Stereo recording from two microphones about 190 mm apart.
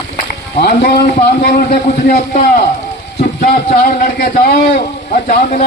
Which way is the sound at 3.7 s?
50° left (ahead or behind).